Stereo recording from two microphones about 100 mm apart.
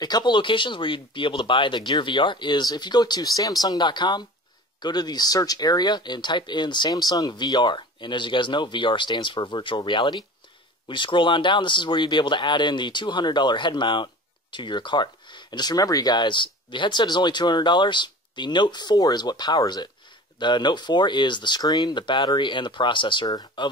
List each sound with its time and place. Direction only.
0.0 s speech: 45° left (ahead or behind)